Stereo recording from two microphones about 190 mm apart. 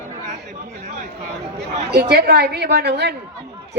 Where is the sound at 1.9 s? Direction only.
55° right (ahead or behind).